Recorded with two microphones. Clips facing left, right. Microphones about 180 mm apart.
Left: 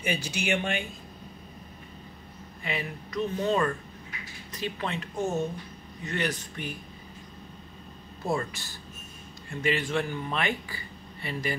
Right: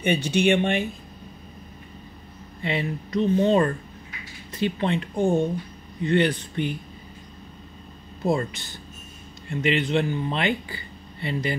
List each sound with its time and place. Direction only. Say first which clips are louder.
0.0 s speech: right 10 dB; 30° right (ahead or behind)
2.6 s speech: right 7 dB; 30° right (ahead or behind)
8.3 s speech: right 6 dB; 20° right (ahead or behind)